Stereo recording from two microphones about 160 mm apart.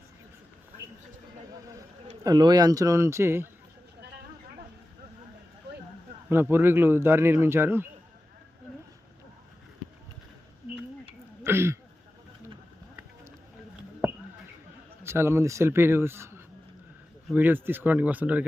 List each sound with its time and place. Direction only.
2.2 s a man's voice: 25° right (ahead or behind)
5.7 s a sound: 90° right
6.2 s a man's voice: 15° right (ahead or behind)
11.4 s a man's voice: 15° right (ahead or behind)
15.0 s a man's voice: 15° right (ahead or behind)
17.3 s a man's voice: 10° right (ahead or behind)